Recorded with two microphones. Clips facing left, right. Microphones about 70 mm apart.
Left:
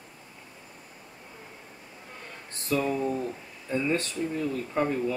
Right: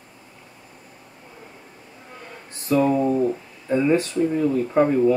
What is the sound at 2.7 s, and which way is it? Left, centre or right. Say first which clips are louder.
Speech: right 8 dB; right.